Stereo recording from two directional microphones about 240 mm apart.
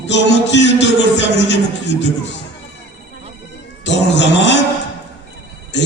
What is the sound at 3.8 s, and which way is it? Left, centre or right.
Chant, left.